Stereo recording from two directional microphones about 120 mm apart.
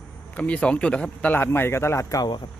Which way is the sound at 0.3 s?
10° left (ahead or behind).